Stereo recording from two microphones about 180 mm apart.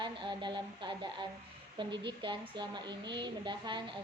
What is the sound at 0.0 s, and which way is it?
A woman's voice, 25° right (ahead or behind).